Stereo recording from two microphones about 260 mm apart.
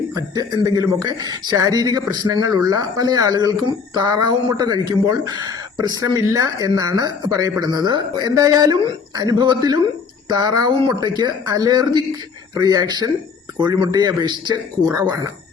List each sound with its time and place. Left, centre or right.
0.1 s speech: centre